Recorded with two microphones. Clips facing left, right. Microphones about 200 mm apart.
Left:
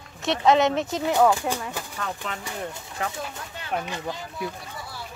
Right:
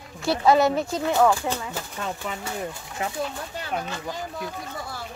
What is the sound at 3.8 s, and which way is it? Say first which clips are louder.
Speech: even; 10° left (ahead or behind).